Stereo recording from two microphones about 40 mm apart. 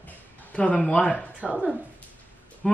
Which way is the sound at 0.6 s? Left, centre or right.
Left.